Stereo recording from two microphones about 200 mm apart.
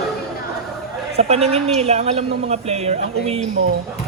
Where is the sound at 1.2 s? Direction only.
30° right (ahead or behind).